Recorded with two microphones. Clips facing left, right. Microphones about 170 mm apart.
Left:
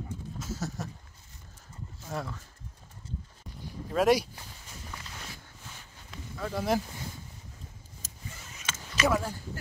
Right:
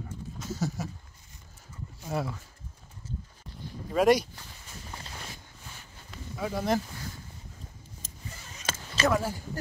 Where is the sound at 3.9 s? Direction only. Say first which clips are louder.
Right 2 dB; centre (ahead or behind).